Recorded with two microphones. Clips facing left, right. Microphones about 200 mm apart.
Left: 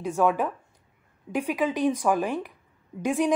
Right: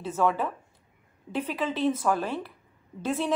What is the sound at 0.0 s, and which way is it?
A woman's voice, 15° left (ahead or behind).